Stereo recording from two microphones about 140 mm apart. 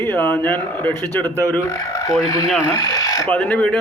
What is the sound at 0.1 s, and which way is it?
Speech, 15° left (ahead or behind).